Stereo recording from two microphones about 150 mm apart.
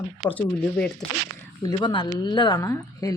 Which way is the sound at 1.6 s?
30° left (ahead or behind).